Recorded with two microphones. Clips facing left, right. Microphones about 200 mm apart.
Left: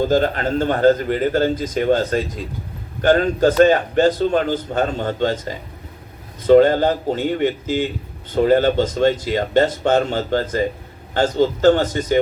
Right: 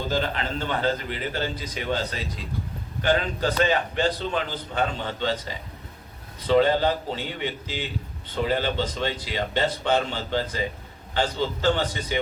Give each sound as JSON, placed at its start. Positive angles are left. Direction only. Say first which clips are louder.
{"t": 0.1, "sound": "a man's voice", "louder": "left 9 dB", "side_deg": 45}